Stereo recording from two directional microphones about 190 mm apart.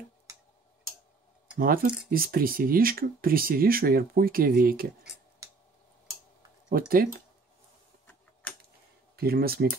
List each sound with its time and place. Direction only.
1.6 s speech: 50° right (ahead or behind)
6.7 s speech: 50° right (ahead or behind)
8.1 s a sound: 10° left (ahead or behind)
9.1 s speech: 55° right (ahead or behind)